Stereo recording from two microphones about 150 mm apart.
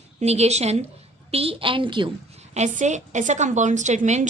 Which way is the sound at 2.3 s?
50° right (ahead or behind).